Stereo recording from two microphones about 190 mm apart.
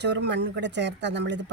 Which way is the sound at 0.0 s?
65° right (ahead or behind).